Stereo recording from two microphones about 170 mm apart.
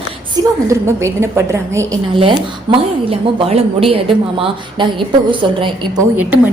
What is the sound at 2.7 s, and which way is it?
A woman's voice, 25° right (ahead or behind).